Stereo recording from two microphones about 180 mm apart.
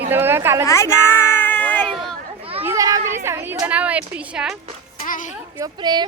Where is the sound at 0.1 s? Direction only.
10° right (ahead or behind).